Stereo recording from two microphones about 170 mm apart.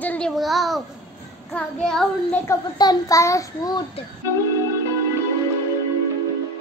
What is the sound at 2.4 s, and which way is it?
A child's voice, 20° left (ahead or behind).